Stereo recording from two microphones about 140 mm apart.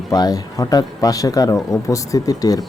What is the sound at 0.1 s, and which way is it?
Speech, 25° left (ahead or behind).